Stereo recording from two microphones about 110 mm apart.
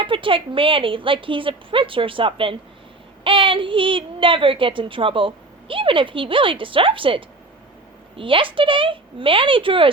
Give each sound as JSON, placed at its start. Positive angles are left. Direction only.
{"t": 0.0, "sound": "a woman's voice", "side_deg": -50}